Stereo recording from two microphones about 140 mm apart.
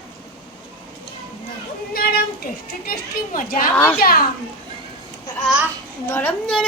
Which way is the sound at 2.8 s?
90° left.